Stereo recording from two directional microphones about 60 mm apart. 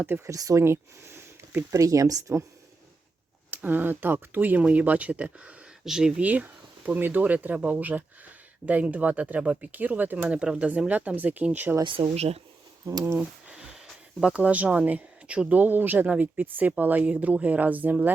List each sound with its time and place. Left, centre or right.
0.3 s speech: right
0.6 s speech: right
1.7 s speech: right
3.5 s speech: right
5.8 s speech: centre
6.2 s speech: right
10.2 s speech: centre
13.1 s a sound: centre
14.2 s speech: centre